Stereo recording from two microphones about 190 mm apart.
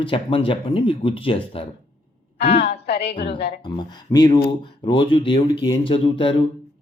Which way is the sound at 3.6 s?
20° left (ahead or behind).